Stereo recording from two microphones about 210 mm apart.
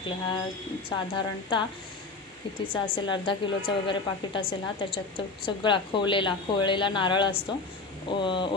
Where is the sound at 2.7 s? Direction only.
20° left (ahead or behind).